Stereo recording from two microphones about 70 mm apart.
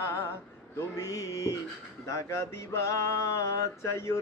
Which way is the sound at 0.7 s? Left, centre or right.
Left.